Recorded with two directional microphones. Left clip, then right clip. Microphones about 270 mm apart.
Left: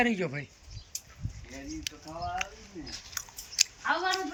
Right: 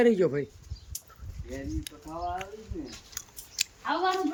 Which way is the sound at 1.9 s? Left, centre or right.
Centre.